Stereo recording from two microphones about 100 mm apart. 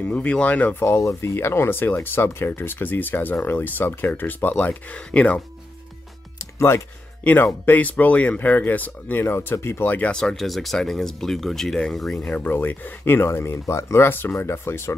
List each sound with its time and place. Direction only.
0.0 s speech: 10° left (ahead or behind)
0.8 s speech: 30° left (ahead or behind); by 5.4 s 10° left (ahead or behind)
6.3 s music: 30° left (ahead or behind)
7.6 s speech: 15° left (ahead or behind)
12.3 s speech: 20° left (ahead or behind)